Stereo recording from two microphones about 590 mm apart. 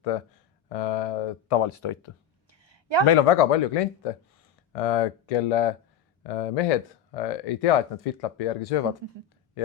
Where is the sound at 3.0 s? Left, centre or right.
Left.